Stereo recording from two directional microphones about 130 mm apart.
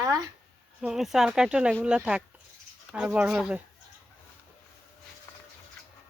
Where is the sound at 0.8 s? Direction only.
5° right (ahead or behind).